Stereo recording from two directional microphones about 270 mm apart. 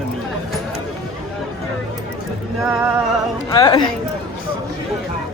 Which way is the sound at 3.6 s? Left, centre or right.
Centre.